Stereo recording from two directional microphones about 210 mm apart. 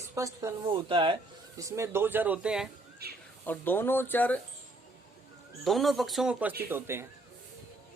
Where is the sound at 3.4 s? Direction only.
10° left (ahead or behind).